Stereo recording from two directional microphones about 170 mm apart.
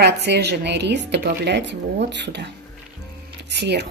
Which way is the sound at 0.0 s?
80° right.